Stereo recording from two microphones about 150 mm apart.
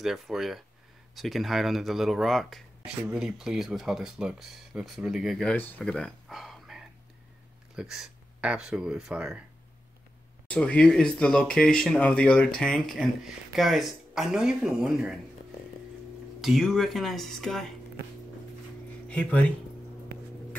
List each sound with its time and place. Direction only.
0.0 s speech: centre (ahead or behind)
10.5 s speech: 10° left (ahead or behind)
16.3 s speech: centre (ahead or behind)
19.0 s speech: 5° left (ahead or behind)